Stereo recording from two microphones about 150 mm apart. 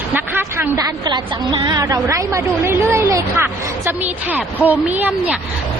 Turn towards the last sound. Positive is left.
turn(degrees=-10)  # may be behind; listen again after turning